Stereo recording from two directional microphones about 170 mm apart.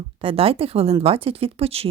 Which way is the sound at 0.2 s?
35° right (ahead or behind).